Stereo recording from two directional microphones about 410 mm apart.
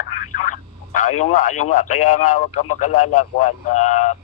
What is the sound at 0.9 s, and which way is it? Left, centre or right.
Speech, centre.